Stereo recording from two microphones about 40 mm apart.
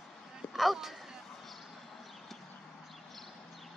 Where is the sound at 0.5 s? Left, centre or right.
Centre.